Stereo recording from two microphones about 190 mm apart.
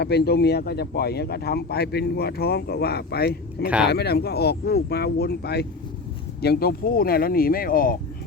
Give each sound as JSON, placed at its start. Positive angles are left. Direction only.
{"t": 0.0, "sound": "speech", "side_deg": 60}